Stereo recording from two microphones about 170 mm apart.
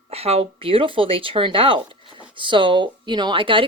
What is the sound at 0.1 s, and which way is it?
Speech, 35° right (ahead or behind).